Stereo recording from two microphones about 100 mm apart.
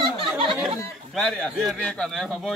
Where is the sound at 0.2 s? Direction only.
60° right (ahead or behind).